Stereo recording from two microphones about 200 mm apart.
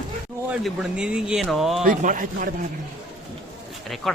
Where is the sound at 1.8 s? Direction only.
45° right (ahead or behind).